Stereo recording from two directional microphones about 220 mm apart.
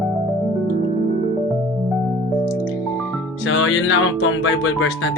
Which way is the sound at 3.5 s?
65° left (ahead or behind).